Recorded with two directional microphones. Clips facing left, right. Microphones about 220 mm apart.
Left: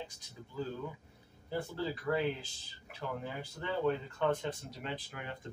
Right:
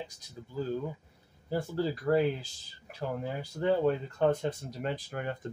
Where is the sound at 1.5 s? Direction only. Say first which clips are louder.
Right 5 dB; 40° right (ahead or behind).